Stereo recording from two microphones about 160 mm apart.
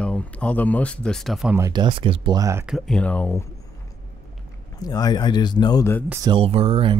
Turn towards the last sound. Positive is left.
turn(degrees=-35)  # may be behind; listen again after turning